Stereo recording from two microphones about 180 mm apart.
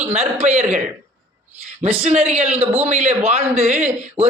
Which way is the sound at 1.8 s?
35° right (ahead or behind).